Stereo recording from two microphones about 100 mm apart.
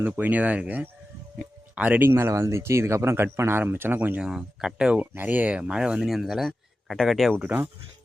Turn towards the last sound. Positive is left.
turn(degrees=-15)  # may be behind; listen again after turning